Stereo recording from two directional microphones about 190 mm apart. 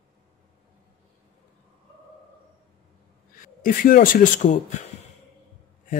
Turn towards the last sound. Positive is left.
turn(degrees=40)  # may be behind; listen again after turning